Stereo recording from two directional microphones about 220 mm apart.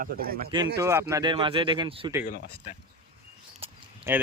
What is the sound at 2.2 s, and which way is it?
Speech, 35° left (ahead or behind).